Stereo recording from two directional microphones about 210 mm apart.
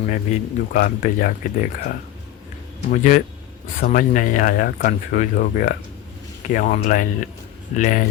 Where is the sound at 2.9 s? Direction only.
40° left (ahead or behind).